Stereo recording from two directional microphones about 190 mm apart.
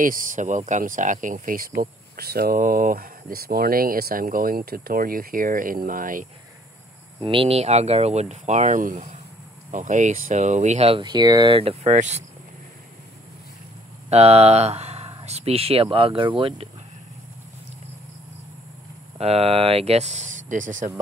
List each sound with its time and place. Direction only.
0.0 s speech: 45° right (ahead or behind)
7.2 s speech: 25° right (ahead or behind)
11.5 s speech: 35° right (ahead or behind)
14.1 s speech: 35° right (ahead or behind)
19.1 s speech: 30° right (ahead or behind)